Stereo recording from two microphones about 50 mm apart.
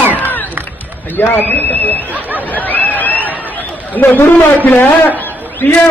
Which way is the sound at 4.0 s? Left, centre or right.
Left.